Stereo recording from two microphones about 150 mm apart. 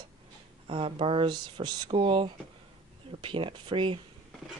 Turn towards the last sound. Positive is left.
turn(degrees=-35)  # may be behind; listen again after turning